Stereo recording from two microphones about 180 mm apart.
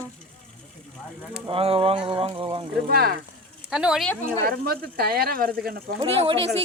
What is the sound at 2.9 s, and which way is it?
Speech, 60° right (ahead or behind).